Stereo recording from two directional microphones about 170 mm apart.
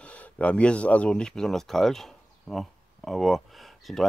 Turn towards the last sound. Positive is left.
turn(degrees=0)  # may be behind; listen again after turning